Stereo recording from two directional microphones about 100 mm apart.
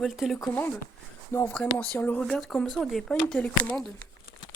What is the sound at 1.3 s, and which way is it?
Speech, 25° left (ahead or behind).